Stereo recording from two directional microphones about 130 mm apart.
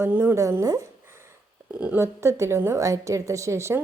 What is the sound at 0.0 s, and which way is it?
Speech, 15° right (ahead or behind).